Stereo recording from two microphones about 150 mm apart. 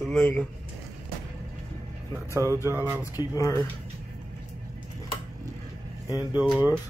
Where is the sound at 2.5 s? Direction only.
15° right (ahead or behind).